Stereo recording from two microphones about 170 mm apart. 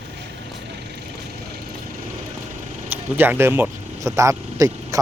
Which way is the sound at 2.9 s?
10° right (ahead or behind).